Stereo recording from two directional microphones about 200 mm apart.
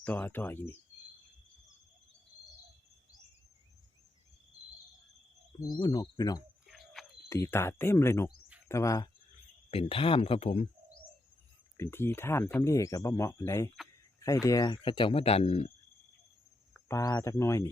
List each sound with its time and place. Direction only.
0.0 s speech: 10° left (ahead or behind)
5.8 s speech: 20° left (ahead or behind)
6.7 s a sound: centre (ahead or behind)
7.3 s speech: 15° left (ahead or behind)
9.6 s speech: 30° left (ahead or behind)
11.8 s speech: 10° left (ahead or behind); by 15.7 s 30° left (ahead or behind)
16.9 s speech: 15° left (ahead or behind)